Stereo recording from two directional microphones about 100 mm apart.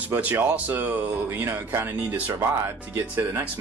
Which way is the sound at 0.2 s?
15° right (ahead or behind).